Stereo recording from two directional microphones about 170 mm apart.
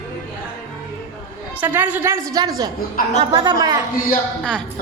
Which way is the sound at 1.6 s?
10° right (ahead or behind).